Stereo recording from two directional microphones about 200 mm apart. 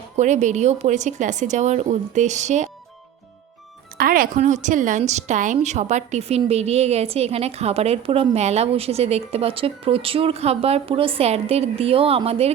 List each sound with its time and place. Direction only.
0.2 s a woman's voice: 35° right (ahead or behind)
3.9 s a woman's voice: 45° right (ahead or behind); by 12.5 s 30° right (ahead or behind)